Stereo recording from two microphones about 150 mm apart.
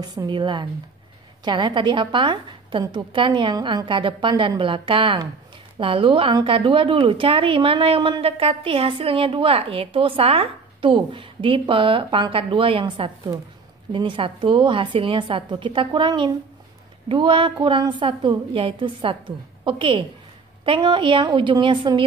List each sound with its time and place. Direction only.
0.0 s a woman's voice: 25° right (ahead or behind)